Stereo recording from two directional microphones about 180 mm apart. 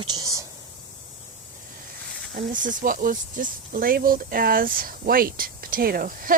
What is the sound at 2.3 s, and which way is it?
Speech, 45° right (ahead or behind).